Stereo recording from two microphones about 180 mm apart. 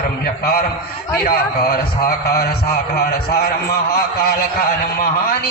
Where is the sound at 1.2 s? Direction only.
55° left (ahead or behind).